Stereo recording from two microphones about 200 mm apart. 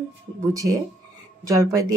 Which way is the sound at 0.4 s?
15° right (ahead or behind).